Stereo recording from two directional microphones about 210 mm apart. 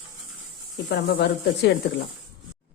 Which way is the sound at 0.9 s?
50° left (ahead or behind).